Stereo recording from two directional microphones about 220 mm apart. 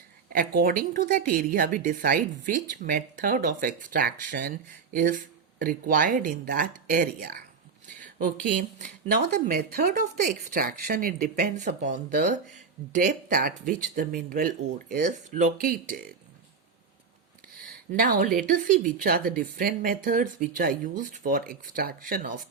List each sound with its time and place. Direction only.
0.3 s a woman's voice: 40° right (ahead or behind)
8.8 s a woman's voice: 45° right (ahead or behind)
17.9 s a woman's voice: 40° right (ahead or behind)